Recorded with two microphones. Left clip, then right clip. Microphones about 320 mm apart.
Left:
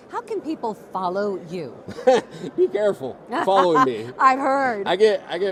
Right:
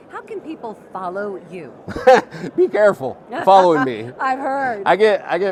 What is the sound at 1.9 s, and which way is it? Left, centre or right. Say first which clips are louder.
A man's voice: right 6 dB; right.